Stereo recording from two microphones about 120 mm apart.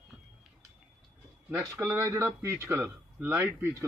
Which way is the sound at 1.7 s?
20° right (ahead or behind).